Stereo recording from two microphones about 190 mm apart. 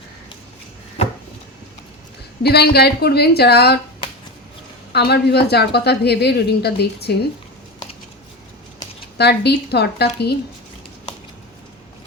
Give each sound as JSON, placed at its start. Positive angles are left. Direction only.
{"t": 2.4, "sound": "a woman's voice", "side_deg": 55}
{"t": 4.9, "sound": "a woman's voice", "side_deg": 60}
{"t": 9.1, "sound": "a woman's voice", "side_deg": 60}